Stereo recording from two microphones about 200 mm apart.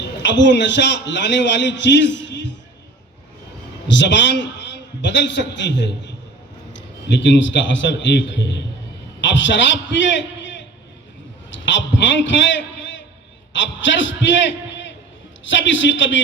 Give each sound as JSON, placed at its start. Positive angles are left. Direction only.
{"t": 0.0, "sound": "a man's voice", "side_deg": 60}
{"t": 3.8, "sound": "a man's voice", "side_deg": 60}
{"t": 7.2, "sound": "a man's voice", "side_deg": 65}
{"t": 11.5, "sound": "a man's voice", "side_deg": 65}
{"t": 15.4, "sound": "a man's voice", "side_deg": 65}